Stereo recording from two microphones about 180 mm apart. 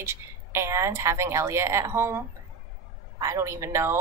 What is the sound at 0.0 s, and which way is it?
Speech, 15° right (ahead or behind).